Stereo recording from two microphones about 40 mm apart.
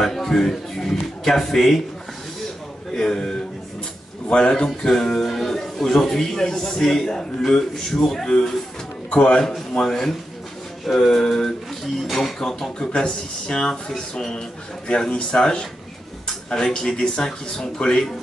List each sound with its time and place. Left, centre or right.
0.0 s a man's voice: centre
2.9 s a man's voice: centre
4.6 s a man's voice: centre
9.1 s a man's voice: left
9.4 s a man's voice: centre
12.7 s a man's voice: centre